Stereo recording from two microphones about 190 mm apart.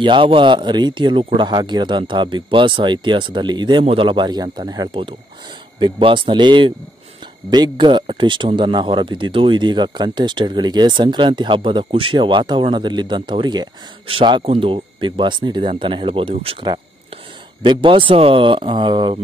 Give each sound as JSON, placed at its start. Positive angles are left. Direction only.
{"t": 0.0, "sound": "speech", "side_deg": -25}